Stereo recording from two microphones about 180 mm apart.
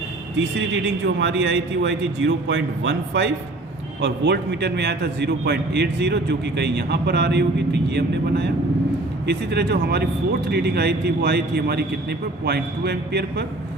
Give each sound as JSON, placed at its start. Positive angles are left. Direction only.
{"t": 0.3, "sound": "a man's voice", "side_deg": -90}
{"t": 4.0, "sound": "a man's voice", "side_deg": -70}